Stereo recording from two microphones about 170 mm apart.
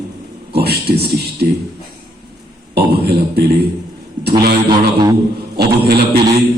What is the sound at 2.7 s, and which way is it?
Speech, 70° right (ahead or behind).